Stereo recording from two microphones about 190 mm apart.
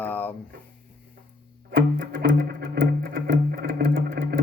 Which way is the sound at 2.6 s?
55° right (ahead or behind).